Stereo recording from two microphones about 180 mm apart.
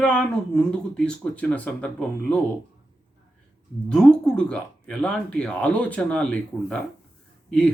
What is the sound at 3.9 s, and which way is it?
Speech, 5° left (ahead or behind).